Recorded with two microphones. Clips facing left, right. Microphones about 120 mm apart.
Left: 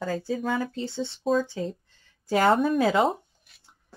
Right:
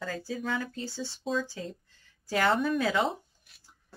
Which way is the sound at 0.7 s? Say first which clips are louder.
Left 5 dB; 25° left (ahead or behind).